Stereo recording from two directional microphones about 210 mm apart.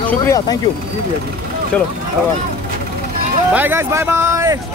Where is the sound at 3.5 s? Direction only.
10° right (ahead or behind).